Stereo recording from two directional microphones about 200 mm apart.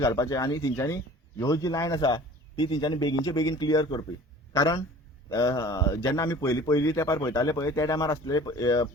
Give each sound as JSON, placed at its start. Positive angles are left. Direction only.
{"t": 0.0, "sound": "a man's voice", "side_deg": 15}